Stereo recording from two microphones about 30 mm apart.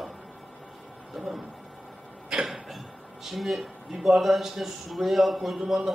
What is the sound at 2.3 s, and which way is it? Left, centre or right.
Cough, right.